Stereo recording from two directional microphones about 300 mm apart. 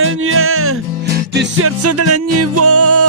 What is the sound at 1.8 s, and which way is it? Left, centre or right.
Music, right.